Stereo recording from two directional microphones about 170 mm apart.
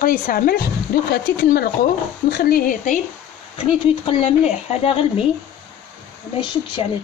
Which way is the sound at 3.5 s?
35° left (ahead or behind).